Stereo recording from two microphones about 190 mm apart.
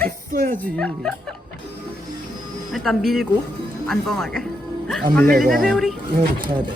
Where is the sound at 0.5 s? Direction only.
5° left (ahead or behind).